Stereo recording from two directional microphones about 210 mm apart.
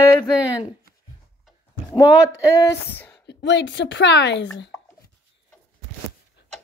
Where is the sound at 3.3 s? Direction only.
55° left (ahead or behind).